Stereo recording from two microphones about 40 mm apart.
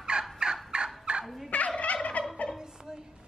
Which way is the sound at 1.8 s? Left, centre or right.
Left.